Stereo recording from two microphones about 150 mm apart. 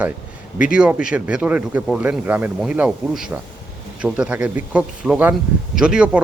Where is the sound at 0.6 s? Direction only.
5° right (ahead or behind).